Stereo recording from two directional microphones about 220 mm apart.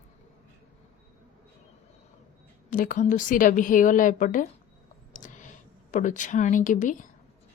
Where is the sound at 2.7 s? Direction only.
35° left (ahead or behind).